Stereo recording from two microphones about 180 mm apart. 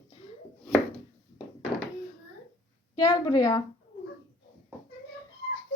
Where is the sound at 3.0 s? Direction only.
20° left (ahead or behind).